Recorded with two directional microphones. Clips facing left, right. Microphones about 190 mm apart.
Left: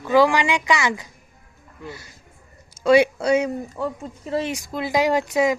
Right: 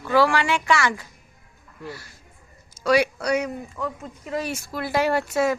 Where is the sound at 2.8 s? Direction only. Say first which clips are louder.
Left 5 dB; 25° left (ahead or behind).